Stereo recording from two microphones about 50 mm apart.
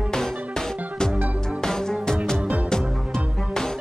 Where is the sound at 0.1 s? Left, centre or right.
Centre.